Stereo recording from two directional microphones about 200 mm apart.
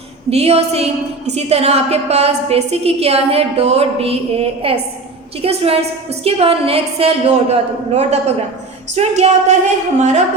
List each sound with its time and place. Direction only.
0.3 s a woman's voice: 30° right (ahead or behind)